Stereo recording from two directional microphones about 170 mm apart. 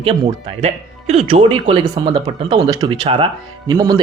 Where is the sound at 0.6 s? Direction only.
40° right (ahead or behind).